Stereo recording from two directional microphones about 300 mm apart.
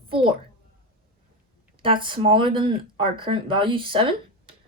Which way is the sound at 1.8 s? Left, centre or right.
Centre.